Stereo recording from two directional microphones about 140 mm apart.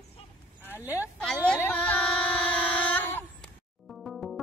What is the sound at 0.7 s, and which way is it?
Speech, 15° right (ahead or behind).